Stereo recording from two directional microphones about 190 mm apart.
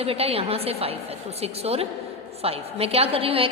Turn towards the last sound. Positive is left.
turn(degrees=-30)  # may be behind; listen again after turning